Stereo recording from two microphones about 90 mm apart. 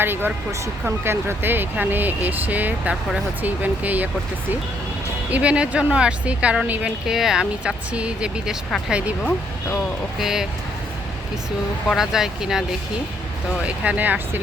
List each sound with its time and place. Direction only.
0.0 s speech: 25° right (ahead or behind)
5.3 s speech: 15° right (ahead or behind)
10.2 s speech: 5° right (ahead or behind)
11.9 s speech: 5° right (ahead or behind)
13.7 s speech: 15° right (ahead or behind)